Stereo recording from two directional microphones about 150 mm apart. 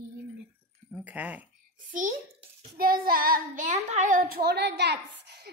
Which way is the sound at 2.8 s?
80° right.